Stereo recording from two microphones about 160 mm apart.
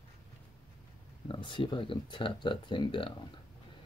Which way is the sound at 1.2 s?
30° left (ahead or behind).